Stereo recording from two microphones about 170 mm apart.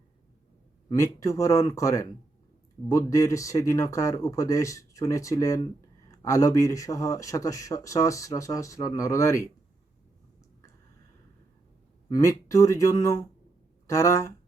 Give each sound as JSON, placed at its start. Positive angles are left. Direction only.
{"t": 0.9, "sound": "speech", "side_deg": 20}
{"t": 12.0, "sound": "speech", "side_deg": 20}